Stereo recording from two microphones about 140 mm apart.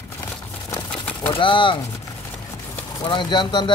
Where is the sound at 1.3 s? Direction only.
35° left (ahead or behind).